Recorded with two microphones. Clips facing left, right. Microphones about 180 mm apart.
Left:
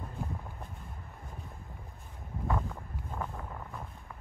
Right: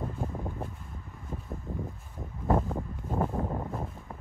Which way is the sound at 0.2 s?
35° right (ahead or behind).